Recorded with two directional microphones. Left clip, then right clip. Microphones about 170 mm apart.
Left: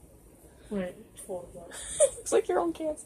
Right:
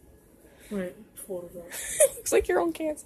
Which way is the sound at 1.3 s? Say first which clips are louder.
Right 1 dB; 40° right (ahead or behind).